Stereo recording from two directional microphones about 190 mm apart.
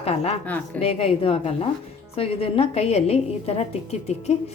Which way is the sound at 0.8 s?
30° left (ahead or behind).